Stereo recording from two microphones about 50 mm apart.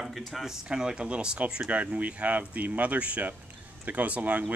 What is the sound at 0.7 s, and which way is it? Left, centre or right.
Speech, centre.